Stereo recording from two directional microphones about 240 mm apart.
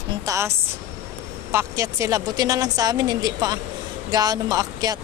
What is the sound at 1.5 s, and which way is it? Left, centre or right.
Speech, centre.